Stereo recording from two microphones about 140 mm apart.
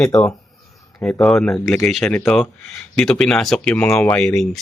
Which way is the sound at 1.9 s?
Centre (ahead or behind).